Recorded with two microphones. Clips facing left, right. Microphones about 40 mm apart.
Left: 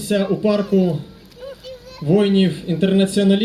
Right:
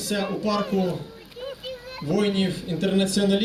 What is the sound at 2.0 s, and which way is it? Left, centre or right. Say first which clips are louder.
Speech: left 8 dB; left.